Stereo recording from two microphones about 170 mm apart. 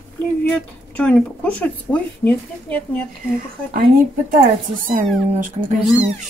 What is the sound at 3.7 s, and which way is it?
Speech, 55° right (ahead or behind).